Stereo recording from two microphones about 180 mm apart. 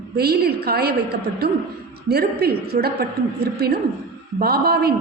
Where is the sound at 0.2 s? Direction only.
60° right (ahead or behind).